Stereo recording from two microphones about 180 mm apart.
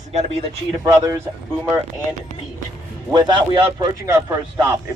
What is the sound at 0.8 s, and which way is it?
Speech, 20° right (ahead or behind).